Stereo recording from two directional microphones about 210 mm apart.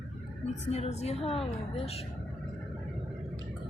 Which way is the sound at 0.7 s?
30° left (ahead or behind).